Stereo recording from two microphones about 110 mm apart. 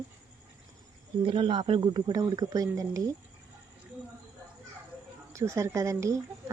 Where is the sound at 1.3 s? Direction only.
50° right (ahead or behind); by 3.0 s 35° right (ahead or behind).